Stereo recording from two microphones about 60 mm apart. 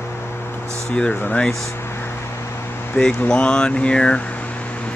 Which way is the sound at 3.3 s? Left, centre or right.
Centre.